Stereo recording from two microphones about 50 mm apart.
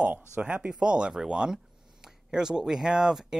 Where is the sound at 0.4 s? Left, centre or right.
Right.